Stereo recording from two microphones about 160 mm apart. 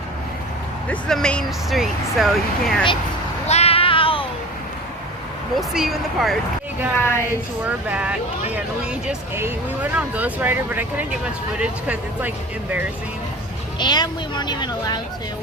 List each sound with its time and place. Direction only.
0.9 s speech: 5° left (ahead or behind)
3.4 s music: 40° left (ahead or behind)
5.5 s speech: centre (ahead or behind)
6.9 s a woman's voice: 15° left (ahead or behind)
7.6 s speech: 10° right (ahead or behind)
13.7 s speech: 25° left (ahead or behind)